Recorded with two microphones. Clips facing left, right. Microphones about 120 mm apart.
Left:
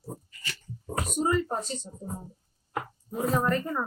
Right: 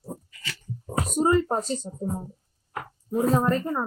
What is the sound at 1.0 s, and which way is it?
Speech, 40° right (ahead or behind).